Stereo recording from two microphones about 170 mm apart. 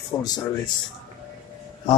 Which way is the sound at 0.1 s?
20° left (ahead or behind).